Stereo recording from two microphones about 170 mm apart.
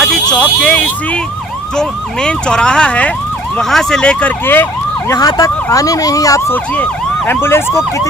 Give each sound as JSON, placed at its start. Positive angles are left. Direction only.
{"t": 0.0, "sound": "speech", "side_deg": 5}
{"t": 5.1, "sound": "emergency vehicle", "side_deg": 20}
{"t": 7.3, "sound": "speech", "side_deg": 15}